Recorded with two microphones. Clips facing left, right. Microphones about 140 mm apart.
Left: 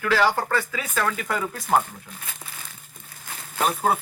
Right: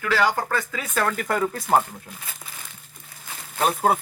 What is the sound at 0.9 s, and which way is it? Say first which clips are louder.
Speech: right 2 dB; 45° right (ahead or behind).